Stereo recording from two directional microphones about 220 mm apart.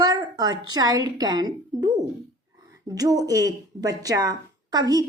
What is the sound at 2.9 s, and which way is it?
Speech, 15° right (ahead or behind).